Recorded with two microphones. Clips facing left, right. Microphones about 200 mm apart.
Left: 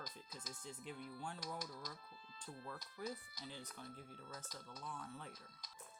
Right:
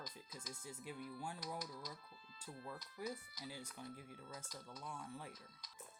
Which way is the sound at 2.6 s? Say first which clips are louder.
Right 1 dB; 10° right (ahead or behind).